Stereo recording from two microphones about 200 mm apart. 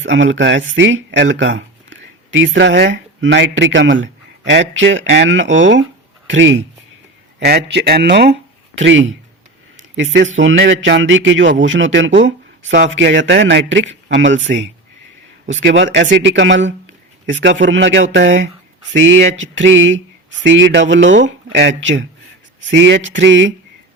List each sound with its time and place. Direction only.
0.0 s a man's voice: 70° right (ahead or behind)
7.3 s speech: 55° right (ahead or behind)
12.2 s a sound: 65° right (ahead or behind)
12.9 s speech: 65° right (ahead or behind)